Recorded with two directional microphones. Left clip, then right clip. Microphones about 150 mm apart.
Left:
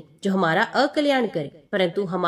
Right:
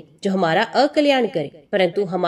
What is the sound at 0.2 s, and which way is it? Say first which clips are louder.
Speech: right 2 dB; 10° right (ahead or behind).